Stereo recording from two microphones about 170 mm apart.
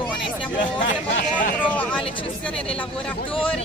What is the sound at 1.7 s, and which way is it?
Speech, 10° left (ahead or behind).